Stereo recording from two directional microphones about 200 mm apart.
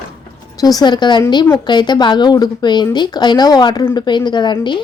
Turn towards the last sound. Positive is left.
turn(degrees=25)  # may be behind; listen again after turning